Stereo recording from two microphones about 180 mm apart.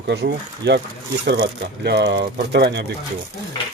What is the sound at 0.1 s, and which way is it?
Speech, 70° right (ahead or behind).